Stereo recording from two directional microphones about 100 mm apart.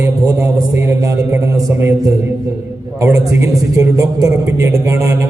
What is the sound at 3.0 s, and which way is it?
A man's voice, 30° right (ahead or behind).